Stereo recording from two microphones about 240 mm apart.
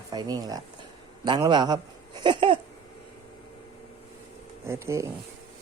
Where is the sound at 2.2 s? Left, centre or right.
Centre.